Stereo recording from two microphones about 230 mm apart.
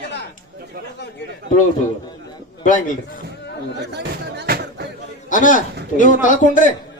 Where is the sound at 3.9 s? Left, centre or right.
Right.